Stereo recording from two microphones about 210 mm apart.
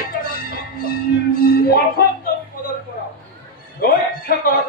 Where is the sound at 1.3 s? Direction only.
45° left (ahead or behind).